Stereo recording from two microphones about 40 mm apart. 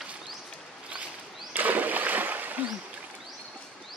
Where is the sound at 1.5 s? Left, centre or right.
Right.